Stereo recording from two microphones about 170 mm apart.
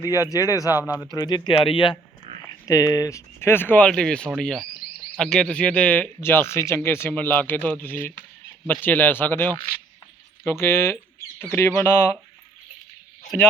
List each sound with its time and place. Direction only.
0.3 s speech: 20° left (ahead or behind)